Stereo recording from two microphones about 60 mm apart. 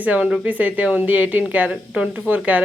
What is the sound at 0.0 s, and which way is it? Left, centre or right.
A woman's voice, right.